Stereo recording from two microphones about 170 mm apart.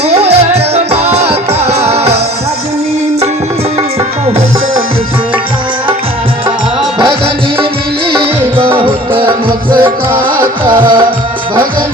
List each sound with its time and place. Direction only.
0.1 s music: 40° right (ahead or behind)
9.8 s music: 15° right (ahead or behind)